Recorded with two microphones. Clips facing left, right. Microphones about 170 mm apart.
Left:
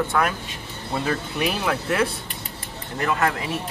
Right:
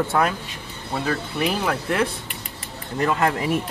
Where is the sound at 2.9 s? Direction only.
30° right (ahead or behind).